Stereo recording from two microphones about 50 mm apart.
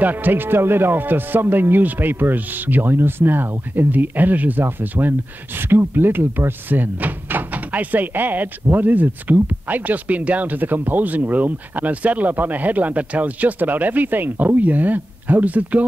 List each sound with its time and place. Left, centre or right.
0.0 s speech: right